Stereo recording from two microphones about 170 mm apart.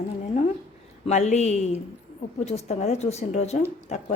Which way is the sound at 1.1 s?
40° left (ahead or behind).